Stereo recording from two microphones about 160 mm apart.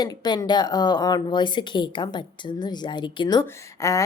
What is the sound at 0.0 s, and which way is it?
Speech, 25° left (ahead or behind).